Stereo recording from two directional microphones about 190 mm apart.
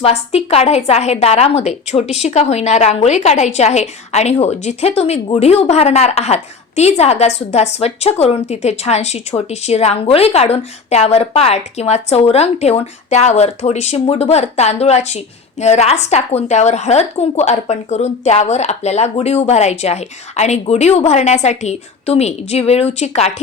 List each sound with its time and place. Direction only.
0.0 s a woman's voice: 35° left (ahead or behind)